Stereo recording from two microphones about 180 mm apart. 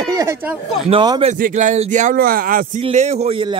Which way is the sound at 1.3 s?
45° right (ahead or behind).